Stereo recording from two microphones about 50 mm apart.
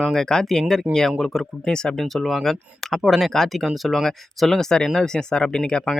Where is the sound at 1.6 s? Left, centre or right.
Centre.